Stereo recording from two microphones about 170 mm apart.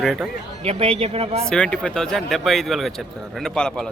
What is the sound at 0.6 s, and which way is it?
Speech, 35° right (ahead or behind).